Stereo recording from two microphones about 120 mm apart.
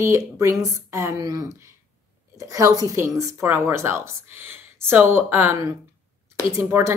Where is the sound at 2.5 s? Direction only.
25° right (ahead or behind).